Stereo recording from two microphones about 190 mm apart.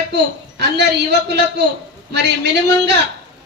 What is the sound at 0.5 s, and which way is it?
A man's voice, 60° right (ahead or behind).